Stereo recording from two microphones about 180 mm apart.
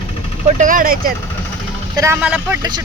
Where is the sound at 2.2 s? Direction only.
5° right (ahead or behind).